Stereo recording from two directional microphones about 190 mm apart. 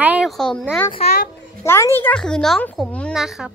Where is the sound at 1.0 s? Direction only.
60° left (ahead or behind).